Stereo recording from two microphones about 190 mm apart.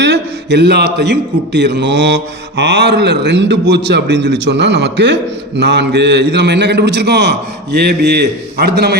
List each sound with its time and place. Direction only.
0.0 s a man's voice: 65° right (ahead or behind)